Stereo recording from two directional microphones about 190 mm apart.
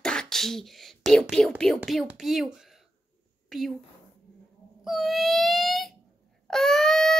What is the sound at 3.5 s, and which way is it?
Speech, centre (ahead or behind).